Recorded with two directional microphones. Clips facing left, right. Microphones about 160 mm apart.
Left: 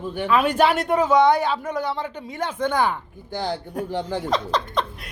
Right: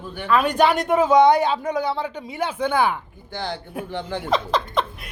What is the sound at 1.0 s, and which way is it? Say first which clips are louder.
Speech: right 3 dB; 15° right (ahead or behind).